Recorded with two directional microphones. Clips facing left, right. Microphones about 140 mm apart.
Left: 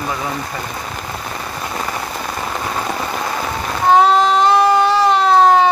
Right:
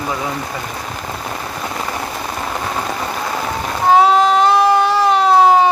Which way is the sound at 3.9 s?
5° right (ahead or behind).